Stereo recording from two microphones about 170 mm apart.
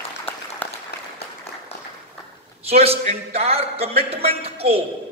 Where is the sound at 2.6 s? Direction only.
35° right (ahead or behind).